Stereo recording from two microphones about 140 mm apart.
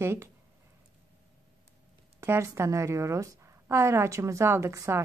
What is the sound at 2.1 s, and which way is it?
A woman's voice, 20° right (ahead or behind).